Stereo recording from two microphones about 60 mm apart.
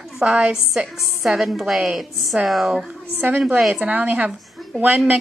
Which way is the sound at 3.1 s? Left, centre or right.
Right.